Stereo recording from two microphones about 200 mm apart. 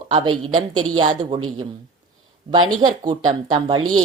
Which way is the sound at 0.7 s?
90° right.